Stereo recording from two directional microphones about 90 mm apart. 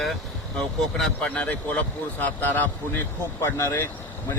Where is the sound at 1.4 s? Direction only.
15° left (ahead or behind).